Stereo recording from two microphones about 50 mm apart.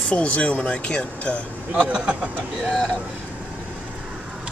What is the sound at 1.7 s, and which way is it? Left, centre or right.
Speech, right.